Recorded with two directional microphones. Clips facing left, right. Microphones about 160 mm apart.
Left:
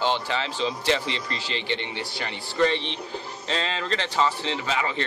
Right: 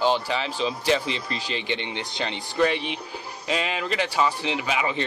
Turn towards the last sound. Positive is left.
turn(degrees=-15)  # may be behind; listen again after turning